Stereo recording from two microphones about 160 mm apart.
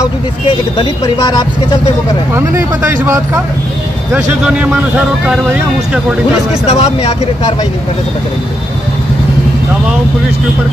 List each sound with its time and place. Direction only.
0.7 s speech: 25° left (ahead or behind)
4.1 s speech: 5° right (ahead or behind)
6.7 s speech: 40° left (ahead or behind)